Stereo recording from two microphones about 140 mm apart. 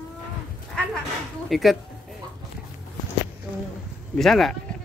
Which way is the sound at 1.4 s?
Centre (ahead or behind).